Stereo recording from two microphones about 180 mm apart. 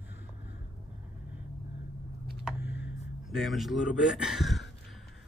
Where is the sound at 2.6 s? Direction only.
75° left (ahead or behind).